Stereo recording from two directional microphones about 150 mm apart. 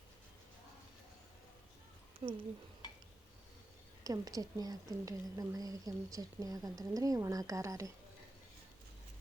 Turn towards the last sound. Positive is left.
turn(degrees=-20)  # may be behind; listen again after turning